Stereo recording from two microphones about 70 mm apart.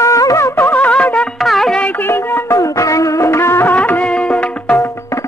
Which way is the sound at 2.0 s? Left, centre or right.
Left.